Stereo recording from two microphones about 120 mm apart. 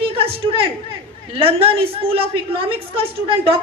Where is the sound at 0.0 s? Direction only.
50° right (ahead or behind).